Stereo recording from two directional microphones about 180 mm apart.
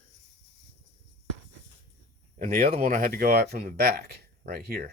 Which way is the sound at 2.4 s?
50° right (ahead or behind).